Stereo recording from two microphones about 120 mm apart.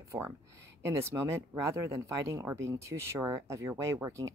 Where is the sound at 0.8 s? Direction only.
20° right (ahead or behind).